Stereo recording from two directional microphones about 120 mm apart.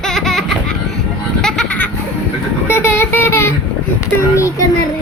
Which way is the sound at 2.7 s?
20° left (ahead or behind).